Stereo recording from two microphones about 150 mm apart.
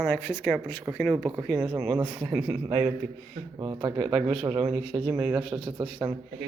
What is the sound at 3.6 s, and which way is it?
Speech, 35° right (ahead or behind).